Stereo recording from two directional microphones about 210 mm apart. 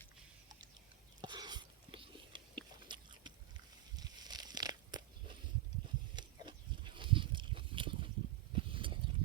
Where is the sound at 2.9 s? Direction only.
20° right (ahead or behind).